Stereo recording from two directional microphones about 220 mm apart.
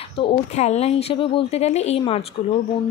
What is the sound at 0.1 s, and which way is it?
Speech, 25° left (ahead or behind).